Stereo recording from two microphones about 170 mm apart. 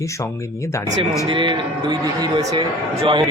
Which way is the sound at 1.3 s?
30° right (ahead or behind).